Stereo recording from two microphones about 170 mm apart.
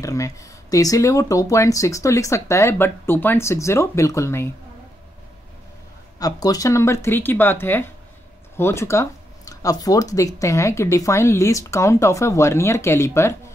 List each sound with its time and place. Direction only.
0.0 s speech: 20° left (ahead or behind)
6.1 s speech: 20° left (ahead or behind)